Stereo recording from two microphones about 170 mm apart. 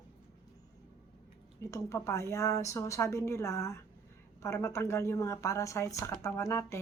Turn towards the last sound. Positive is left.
turn(degrees=15)  # may be behind; listen again after turning